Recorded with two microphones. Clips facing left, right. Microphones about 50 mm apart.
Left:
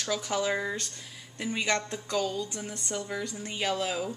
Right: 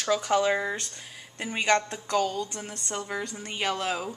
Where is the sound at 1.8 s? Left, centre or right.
Centre.